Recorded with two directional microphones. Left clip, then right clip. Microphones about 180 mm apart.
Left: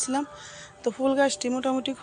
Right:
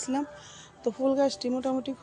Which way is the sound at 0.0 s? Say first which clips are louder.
Left 3 dB; 10° right (ahead or behind).